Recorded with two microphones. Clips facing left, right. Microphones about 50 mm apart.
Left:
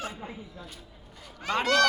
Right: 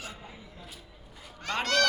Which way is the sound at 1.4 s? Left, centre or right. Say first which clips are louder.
Left 3 dB; centre.